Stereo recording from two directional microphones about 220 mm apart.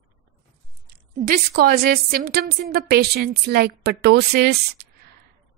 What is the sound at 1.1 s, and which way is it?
A woman's voice, 40° right (ahead or behind).